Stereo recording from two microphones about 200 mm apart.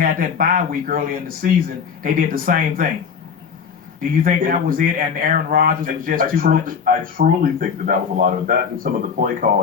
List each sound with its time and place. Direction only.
0.0 s speech: 45° right (ahead or behind)
4.2 s speech: 45° right (ahead or behind)